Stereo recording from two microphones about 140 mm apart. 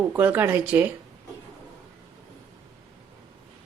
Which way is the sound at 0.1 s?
10° right (ahead or behind).